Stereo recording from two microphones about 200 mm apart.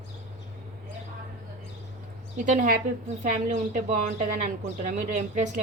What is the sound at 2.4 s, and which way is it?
A woman's voice, 45° right (ahead or behind).